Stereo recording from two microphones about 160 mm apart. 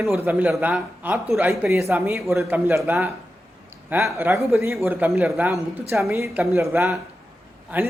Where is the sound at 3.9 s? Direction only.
15° right (ahead or behind).